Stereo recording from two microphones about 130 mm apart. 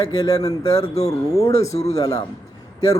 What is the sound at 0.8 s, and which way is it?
Speech, 55° left (ahead or behind).